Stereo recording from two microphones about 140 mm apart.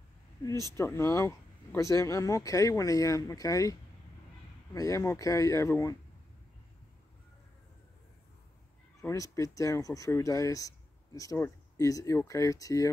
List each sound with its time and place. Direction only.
0.7 s speech: 20° left (ahead or behind)
4.7 s speech: 20° left (ahead or behind)
9.0 s speech: 25° left (ahead or behind)